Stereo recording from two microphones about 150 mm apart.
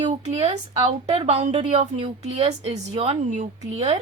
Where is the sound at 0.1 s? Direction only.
45° right (ahead or behind).